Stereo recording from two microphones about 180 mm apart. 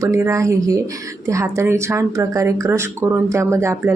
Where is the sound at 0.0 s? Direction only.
15° right (ahead or behind).